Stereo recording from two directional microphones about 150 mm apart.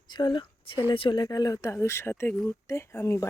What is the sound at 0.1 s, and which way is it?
Speech, 30° left (ahead or behind).